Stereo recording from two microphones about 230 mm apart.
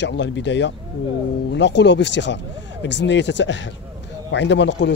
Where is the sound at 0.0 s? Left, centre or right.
Left.